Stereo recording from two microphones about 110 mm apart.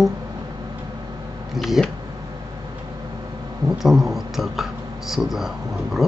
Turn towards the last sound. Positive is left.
turn(degrees=-5)  # may be behind; listen again after turning